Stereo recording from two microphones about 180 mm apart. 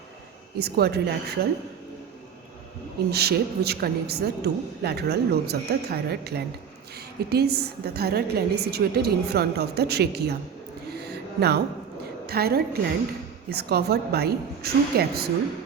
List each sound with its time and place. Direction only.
0.6 s a man's voice: 65° right (ahead or behind)
3.1 s a man's voice: 65° right (ahead or behind)
11.0 s music: 65° right (ahead or behind)
12.2 s a man's voice: 60° right (ahead or behind)